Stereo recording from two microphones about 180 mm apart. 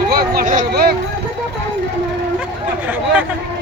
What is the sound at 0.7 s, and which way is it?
Speech, 60° right (ahead or behind).